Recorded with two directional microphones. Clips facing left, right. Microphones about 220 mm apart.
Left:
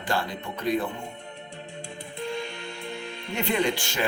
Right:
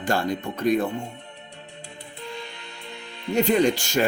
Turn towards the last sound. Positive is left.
turn(degrees=-45)  # may be behind; listen again after turning